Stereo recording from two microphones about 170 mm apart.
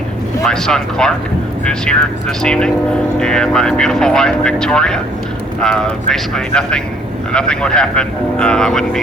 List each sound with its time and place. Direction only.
0.4 s speech: 5° left (ahead or behind)